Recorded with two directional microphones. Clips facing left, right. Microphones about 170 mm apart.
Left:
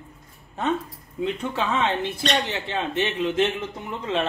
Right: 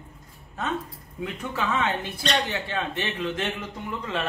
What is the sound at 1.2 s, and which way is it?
A man's voice, 25° left (ahead or behind).